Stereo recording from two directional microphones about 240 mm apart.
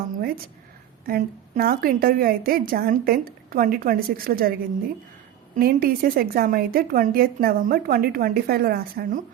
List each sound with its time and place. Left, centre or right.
0.2 s a sound: right
1.0 s a woman's voice: right
5.5 s a woman's voice: right